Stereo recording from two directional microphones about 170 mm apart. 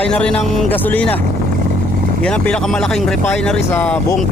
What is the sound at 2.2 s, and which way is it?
Speech, 5° left (ahead or behind).